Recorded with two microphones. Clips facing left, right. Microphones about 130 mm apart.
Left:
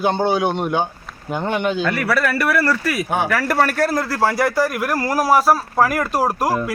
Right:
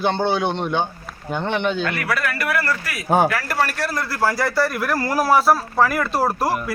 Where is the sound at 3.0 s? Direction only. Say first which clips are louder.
Right 8 dB; 40° right (ahead or behind).